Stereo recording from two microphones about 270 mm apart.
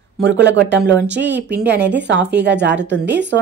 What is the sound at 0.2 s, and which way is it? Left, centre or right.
Speech, right.